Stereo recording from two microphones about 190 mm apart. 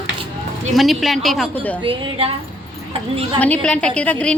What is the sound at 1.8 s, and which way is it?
A woman's voice, 30° right (ahead or behind).